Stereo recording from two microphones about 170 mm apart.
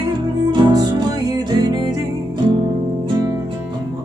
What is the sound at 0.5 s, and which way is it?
Music, 25° right (ahead or behind).